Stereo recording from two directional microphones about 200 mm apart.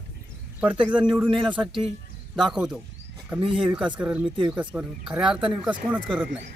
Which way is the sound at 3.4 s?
25° right (ahead or behind).